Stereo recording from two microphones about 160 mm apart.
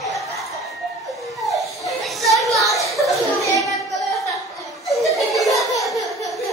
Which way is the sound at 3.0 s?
20° left (ahead or behind).